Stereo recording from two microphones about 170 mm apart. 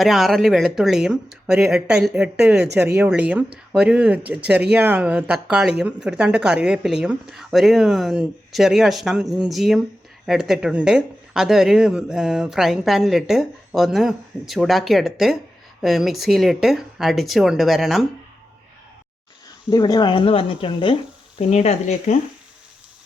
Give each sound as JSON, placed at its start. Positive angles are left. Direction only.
{"t": 0.0, "sound": "speech", "side_deg": 0}
{"t": 19.7, "sound": "speech", "side_deg": 25}